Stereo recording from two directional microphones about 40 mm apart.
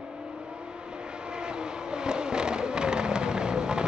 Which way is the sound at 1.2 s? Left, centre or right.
Right.